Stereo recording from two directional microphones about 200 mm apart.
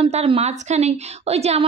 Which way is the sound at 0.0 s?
30° right (ahead or behind).